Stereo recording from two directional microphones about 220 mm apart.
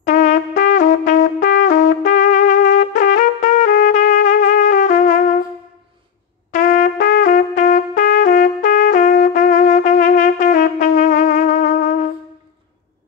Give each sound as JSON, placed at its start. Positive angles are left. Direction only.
{"t": 0.0, "sound": "music", "side_deg": 35}
{"t": 1.7, "sound": "trumpet", "side_deg": 35}
{"t": 6.5, "sound": "trumpet", "side_deg": 35}